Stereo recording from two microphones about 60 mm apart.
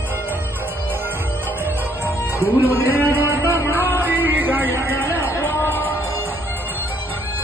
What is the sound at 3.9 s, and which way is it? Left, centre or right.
Music, right.